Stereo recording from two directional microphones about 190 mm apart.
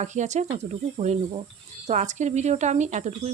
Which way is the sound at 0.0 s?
40° right (ahead or behind).